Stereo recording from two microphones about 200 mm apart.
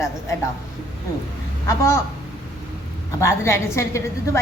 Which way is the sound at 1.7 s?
15° left (ahead or behind).